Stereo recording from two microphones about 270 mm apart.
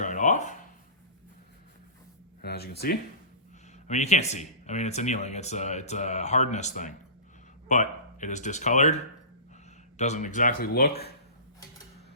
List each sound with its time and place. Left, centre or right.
0.0 s a sound: left
2.4 s speech: left
3.8 s speech: left
10.0 s speech: left